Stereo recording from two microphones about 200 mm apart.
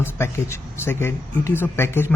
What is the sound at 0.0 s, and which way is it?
Speech, 10° left (ahead or behind).